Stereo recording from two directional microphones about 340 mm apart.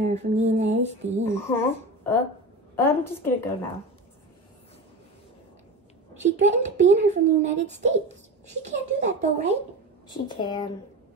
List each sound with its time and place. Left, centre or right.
0.0 s speech: centre
1.2 s a woman's voice: centre
6.2 s speech: centre
10.0 s a woman's voice: centre